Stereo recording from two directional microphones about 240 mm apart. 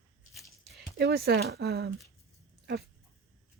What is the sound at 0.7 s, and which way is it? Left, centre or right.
Speech, right.